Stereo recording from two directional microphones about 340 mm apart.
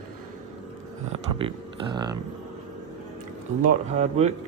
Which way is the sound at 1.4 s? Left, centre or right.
Centre.